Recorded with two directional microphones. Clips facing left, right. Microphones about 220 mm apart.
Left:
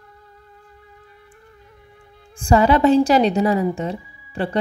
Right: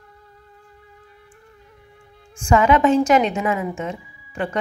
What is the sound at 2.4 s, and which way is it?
A woman's voice, 35° left (ahead or behind).